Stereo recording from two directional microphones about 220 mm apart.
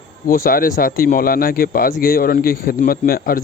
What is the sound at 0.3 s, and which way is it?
A man's voice, 40° left (ahead or behind).